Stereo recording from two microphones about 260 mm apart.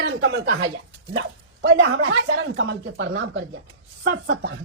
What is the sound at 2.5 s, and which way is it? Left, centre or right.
A woman's voice, right.